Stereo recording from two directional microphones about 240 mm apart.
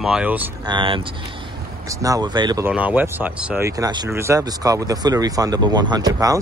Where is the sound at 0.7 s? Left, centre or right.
Centre.